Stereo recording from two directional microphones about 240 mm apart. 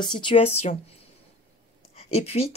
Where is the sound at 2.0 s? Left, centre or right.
Left.